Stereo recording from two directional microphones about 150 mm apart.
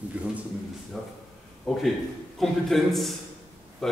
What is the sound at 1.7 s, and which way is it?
A man's voice, centre (ahead or behind).